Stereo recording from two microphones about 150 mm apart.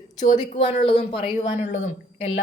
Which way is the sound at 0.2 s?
55° left (ahead or behind).